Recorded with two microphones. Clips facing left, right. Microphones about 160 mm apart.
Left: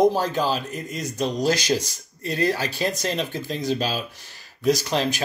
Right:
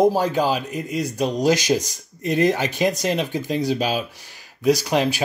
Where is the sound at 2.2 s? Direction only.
20° right (ahead or behind).